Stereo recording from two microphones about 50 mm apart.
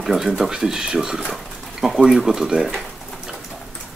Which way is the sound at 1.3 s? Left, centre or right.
Centre.